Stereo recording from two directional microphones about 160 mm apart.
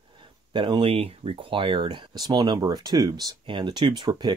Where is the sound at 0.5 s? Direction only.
30° right (ahead or behind).